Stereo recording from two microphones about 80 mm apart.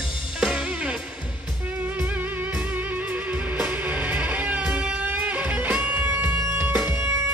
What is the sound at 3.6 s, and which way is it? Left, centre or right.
Music, right.